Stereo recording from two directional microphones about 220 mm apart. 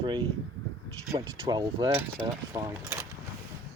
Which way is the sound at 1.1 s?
15° right (ahead or behind).